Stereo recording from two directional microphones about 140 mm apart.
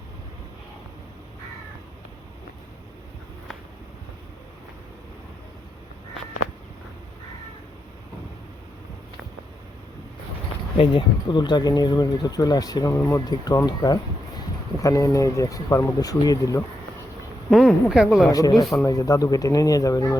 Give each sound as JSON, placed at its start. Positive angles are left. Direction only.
{"t": 10.8, "sound": "speech", "side_deg": 35}
{"t": 17.5, "sound": "speech", "side_deg": 0}
{"t": 18.3, "sound": "speech", "side_deg": 25}